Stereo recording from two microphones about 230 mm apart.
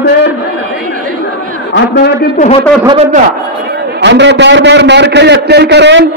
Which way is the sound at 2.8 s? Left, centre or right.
Centre.